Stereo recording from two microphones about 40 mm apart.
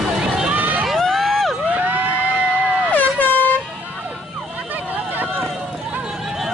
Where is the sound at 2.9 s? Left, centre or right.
Left.